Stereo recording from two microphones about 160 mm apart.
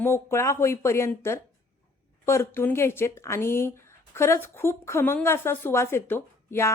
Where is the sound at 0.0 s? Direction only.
15° left (ahead or behind).